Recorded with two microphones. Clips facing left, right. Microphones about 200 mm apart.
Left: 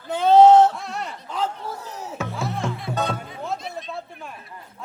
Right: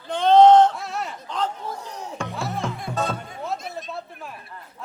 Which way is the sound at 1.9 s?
5° left (ahead or behind).